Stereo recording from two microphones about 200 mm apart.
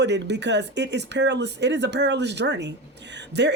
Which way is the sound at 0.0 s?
60° right (ahead or behind).